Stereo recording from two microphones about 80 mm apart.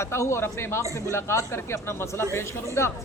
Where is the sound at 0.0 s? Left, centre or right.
Left.